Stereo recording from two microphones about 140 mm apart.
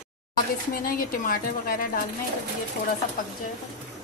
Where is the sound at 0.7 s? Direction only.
90° left.